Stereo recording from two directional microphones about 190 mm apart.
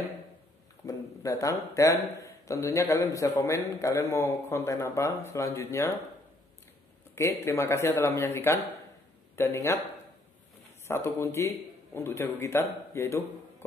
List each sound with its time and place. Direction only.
0.8 s a man's voice: 15° left (ahead or behind)
7.2 s a man's voice: 15° left (ahead or behind)
10.9 s a man's voice: 15° left (ahead or behind)